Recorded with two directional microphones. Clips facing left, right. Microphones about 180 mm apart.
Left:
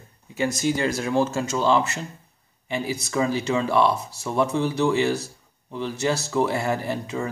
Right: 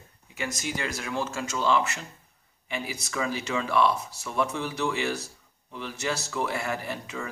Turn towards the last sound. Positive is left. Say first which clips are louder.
# left 7 dB
turn(degrees=30)  # may be behind; listen again after turning